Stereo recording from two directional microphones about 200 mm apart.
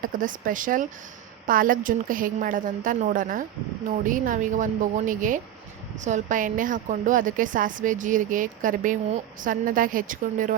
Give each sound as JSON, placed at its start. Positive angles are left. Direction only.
{"t": 0.0, "sound": "a woman's voice", "side_deg": -40}